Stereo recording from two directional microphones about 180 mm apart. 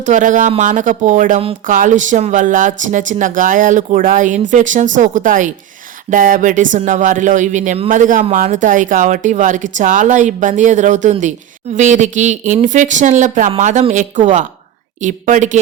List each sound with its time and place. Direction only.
0.0 s speech: 45° right (ahead or behind)